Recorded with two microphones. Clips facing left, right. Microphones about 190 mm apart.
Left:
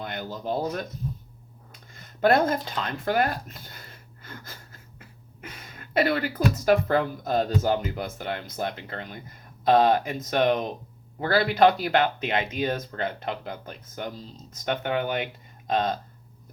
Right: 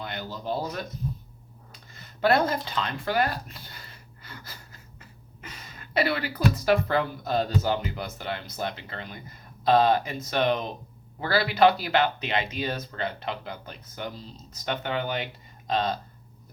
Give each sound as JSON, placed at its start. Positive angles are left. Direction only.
{"t": 0.0, "sound": "speech", "side_deg": 50}
{"t": 1.7, "sound": "a sound", "side_deg": 50}
{"t": 7.3, "sound": "speech", "side_deg": 50}